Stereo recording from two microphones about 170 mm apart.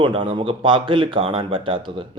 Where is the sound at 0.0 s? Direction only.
30° right (ahead or behind).